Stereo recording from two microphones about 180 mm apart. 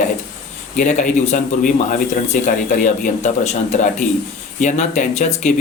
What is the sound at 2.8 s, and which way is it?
A man's voice, 40° left (ahead or behind).